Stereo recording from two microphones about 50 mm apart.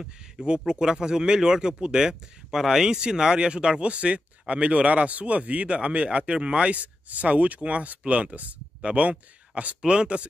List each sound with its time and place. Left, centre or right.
0.0 s speech: centre